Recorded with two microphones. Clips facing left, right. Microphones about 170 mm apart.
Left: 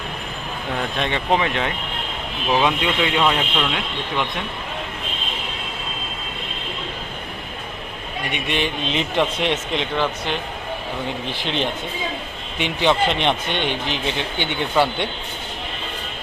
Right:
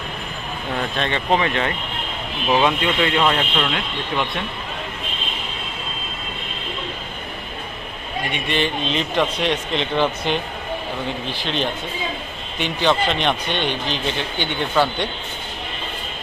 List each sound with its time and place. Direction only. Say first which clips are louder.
0.9 s speech: even; 15° left (ahead or behind)
8.4 s speech: right 2 dB; 15° left (ahead or behind)
11.4 s speech: even; 20° left (ahead or behind)